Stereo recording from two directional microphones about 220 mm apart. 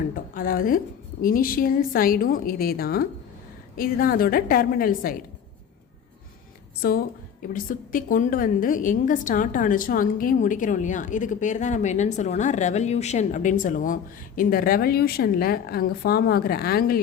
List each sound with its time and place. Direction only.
0.1 s a woman's voice: 40° left (ahead or behind)
7.5 s a woman's voice: 40° left (ahead or behind)